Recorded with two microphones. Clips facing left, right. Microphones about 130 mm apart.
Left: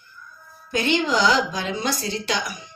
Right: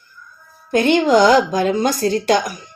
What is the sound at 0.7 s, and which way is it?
Speech, 50° right (ahead or behind).